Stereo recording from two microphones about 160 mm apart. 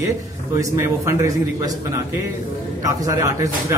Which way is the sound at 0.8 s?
20° right (ahead or behind).